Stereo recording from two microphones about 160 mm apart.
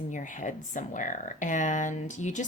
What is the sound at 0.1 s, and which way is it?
Speech, 55° left (ahead or behind).